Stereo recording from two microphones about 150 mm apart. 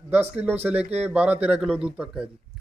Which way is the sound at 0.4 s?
10° right (ahead or behind).